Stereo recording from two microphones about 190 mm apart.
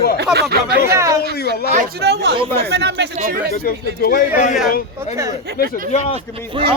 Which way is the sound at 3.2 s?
50° right (ahead or behind).